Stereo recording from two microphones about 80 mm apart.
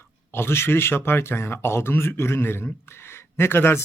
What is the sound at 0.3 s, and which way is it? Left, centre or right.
Speech, left.